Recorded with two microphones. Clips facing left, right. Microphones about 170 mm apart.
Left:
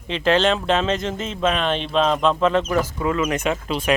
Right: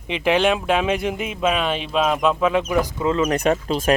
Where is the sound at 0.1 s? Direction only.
15° right (ahead or behind).